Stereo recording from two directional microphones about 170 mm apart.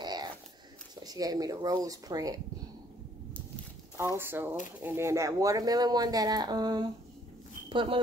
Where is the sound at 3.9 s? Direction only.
15° right (ahead or behind).